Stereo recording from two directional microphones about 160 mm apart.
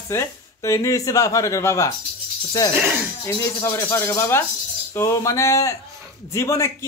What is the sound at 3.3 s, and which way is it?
A woman's voice, 20° left (ahead or behind).